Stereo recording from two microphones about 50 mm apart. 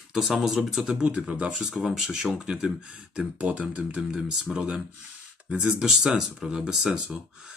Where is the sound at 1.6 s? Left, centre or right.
Centre.